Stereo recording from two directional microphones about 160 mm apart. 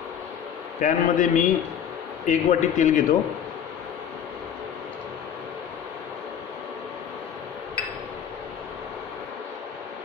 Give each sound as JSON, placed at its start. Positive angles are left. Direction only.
{"t": 0.7, "sound": "a man's voice", "side_deg": 55}